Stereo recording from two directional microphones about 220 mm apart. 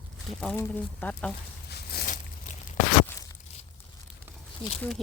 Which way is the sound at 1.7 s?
45° left (ahead or behind).